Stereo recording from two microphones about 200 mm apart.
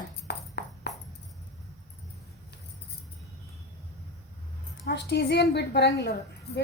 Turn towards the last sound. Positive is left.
turn(degrees=55)  # may be behind; listen again after turning